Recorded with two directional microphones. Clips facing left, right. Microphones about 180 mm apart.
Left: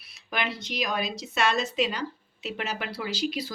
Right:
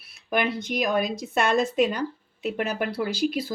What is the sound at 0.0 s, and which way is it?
Speech, 50° right (ahead or behind).